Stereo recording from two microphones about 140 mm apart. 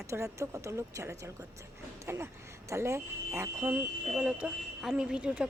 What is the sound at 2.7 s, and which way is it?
A woman's voice, 20° right (ahead or behind).